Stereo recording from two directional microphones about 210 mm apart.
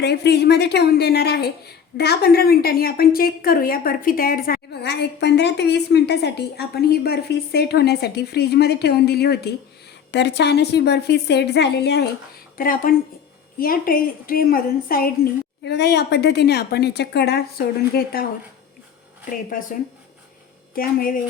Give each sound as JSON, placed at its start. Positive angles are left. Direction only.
{"t": 0.0, "sound": "a woman's voice", "side_deg": 50}
{"t": 20.7, "sound": "speech", "side_deg": 40}